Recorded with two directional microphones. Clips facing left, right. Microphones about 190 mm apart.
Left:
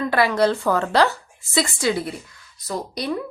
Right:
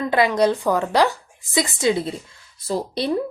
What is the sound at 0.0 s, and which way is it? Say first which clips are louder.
A woman's voice: right 1 dB; 20° right (ahead or behind).